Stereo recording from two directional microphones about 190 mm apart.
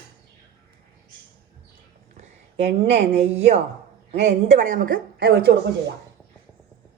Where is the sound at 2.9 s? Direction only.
35° right (ahead or behind); by 5.5 s 55° right (ahead or behind).